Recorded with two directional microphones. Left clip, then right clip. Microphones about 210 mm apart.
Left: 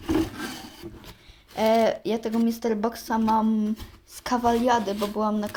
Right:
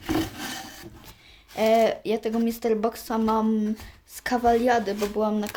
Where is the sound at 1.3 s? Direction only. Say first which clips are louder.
Right 1 dB; 5° right (ahead or behind).